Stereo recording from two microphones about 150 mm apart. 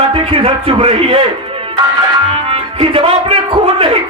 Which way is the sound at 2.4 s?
40° right (ahead or behind).